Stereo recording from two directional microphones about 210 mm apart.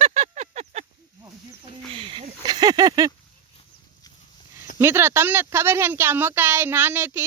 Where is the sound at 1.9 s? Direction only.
25° right (ahead or behind).